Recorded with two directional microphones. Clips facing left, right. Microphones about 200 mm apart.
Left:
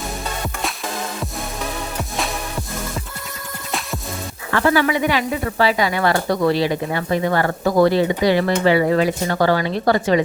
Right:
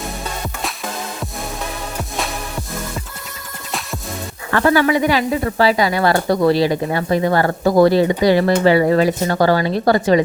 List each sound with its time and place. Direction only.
3.7 s music: centre (ahead or behind)
4.5 s sizzle: 45° right (ahead or behind)